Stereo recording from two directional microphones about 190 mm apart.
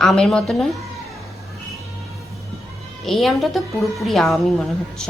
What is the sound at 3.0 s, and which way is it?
A woman's voice, centre (ahead or behind).